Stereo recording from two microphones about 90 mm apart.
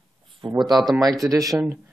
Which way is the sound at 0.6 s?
50° right (ahead or behind).